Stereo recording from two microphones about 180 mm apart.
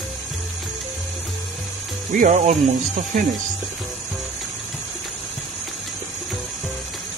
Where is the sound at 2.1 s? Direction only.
45° right (ahead or behind).